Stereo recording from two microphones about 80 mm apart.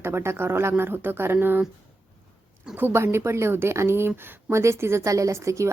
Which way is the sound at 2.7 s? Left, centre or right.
Right.